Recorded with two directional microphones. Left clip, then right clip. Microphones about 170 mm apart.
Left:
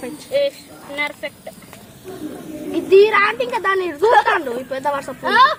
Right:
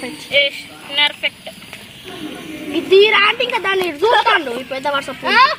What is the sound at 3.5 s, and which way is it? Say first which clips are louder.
A woman's voice: right 1 dB; 10° right (ahead or behind).